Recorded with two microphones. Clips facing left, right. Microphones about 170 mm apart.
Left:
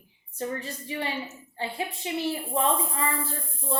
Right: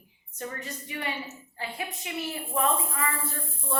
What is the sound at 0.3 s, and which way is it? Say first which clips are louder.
A woman's voice: left 5 dB; 30° left (ahead or behind).